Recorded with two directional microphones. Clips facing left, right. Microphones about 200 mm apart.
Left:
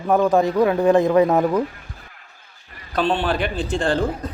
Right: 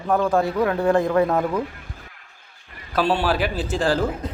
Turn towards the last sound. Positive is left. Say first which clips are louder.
# even
turn(degrees=-5)  # may be behind; listen again after turning